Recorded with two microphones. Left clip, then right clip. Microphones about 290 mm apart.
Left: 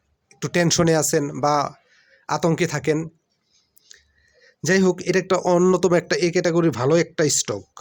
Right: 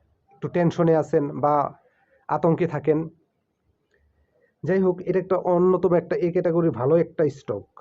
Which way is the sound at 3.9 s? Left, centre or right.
Left.